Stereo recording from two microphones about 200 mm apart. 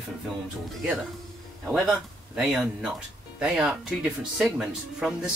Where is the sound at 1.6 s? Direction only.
Centre (ahead or behind).